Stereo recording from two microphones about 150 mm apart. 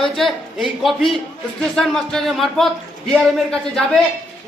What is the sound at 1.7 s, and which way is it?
A man's voice, centre (ahead or behind).